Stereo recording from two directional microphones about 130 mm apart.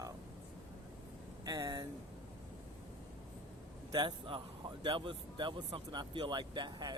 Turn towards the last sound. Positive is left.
turn(degrees=-35)  # may be behind; listen again after turning